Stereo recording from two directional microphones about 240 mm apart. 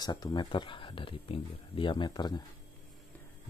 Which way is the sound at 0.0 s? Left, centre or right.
Centre.